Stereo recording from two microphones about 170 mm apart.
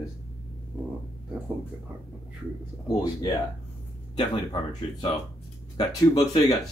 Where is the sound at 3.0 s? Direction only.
20° left (ahead or behind).